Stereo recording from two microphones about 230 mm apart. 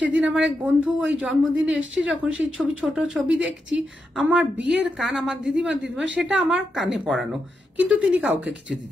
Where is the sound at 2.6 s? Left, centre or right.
Centre.